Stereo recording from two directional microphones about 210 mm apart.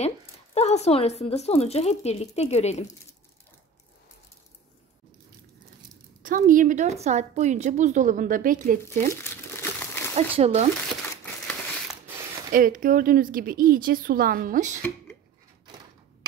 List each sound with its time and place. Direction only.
0.6 s speech: 30° left (ahead or behind)
6.2 s a woman's voice: 40° right (ahead or behind)
9.1 s crumpling: 10° left (ahead or behind)
10.1 s speech: 30° right (ahead or behind)
12.5 s a woman's voice: 40° right (ahead or behind)